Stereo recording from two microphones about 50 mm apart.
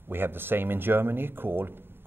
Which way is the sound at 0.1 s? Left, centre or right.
Right.